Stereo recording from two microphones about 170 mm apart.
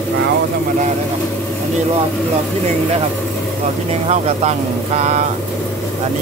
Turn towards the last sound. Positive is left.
turn(degrees=-40)  # may be behind; listen again after turning